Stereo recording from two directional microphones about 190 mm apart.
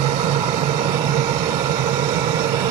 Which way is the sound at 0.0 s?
35° right (ahead or behind).